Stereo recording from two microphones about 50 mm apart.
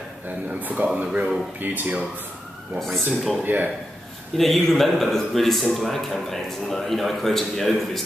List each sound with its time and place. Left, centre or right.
0.6 s speech: right
2.8 s a man's voice: centre
3.4 s speech: right
4.4 s a man's voice: centre